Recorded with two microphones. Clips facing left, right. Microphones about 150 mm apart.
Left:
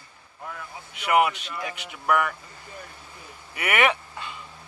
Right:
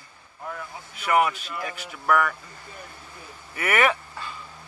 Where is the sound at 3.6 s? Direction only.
20° left (ahead or behind).